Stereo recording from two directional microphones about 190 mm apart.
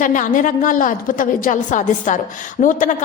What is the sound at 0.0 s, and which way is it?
A woman's voice, 45° left (ahead or behind).